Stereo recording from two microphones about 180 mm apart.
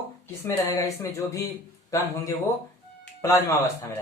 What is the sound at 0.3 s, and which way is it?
Speech, 15° left (ahead or behind).